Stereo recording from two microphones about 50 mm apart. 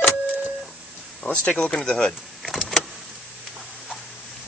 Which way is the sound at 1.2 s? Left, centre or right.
Left.